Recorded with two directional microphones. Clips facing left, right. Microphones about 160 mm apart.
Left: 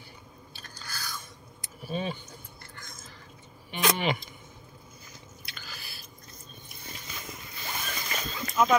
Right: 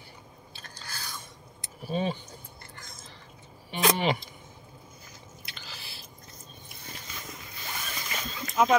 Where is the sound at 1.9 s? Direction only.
30° right (ahead or behind).